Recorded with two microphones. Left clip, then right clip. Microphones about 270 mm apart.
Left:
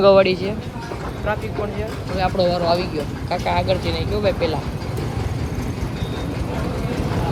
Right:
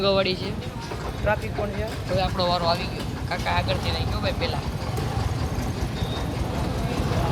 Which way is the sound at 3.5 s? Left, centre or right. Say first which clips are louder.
Left 5 dB; centre.